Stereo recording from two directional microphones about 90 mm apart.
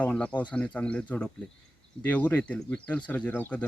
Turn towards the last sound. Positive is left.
turn(degrees=20)  # may be behind; listen again after turning